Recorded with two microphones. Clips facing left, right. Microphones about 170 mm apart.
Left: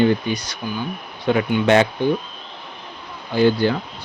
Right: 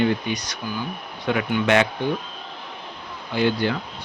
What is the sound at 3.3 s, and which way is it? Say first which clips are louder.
Speech: left 5 dB; 35° left (ahead or behind).